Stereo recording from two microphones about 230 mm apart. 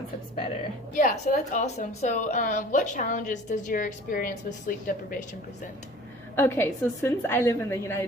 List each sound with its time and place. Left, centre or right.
0.9 s a woman's voice: left
6.3 s a woman's voice: centre